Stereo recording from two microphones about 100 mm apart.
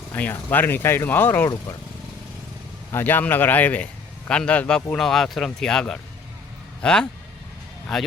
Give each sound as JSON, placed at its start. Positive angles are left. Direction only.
{"t": 0.1, "sound": "speech", "side_deg": 20}
{"t": 2.9, "sound": "speech", "side_deg": 20}